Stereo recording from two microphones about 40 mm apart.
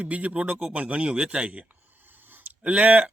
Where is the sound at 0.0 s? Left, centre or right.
Right.